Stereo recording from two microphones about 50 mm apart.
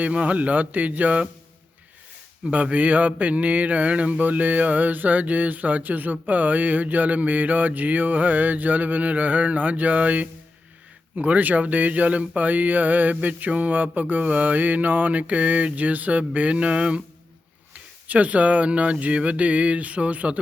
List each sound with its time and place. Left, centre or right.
0.0 s speech: right
2.5 s mantra: right
17.7 s speech: right